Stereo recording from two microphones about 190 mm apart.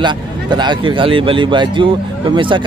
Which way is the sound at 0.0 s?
25° right (ahead or behind).